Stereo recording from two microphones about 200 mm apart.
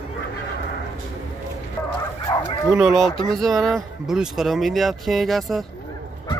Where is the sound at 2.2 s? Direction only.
25° left (ahead or behind).